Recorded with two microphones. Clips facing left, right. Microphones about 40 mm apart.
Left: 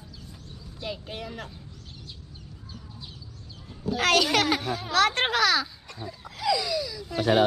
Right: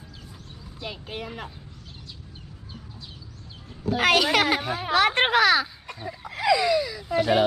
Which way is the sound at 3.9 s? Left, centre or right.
Centre.